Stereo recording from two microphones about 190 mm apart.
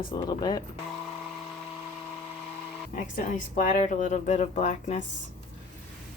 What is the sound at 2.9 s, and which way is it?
Speech, 40° left (ahead or behind).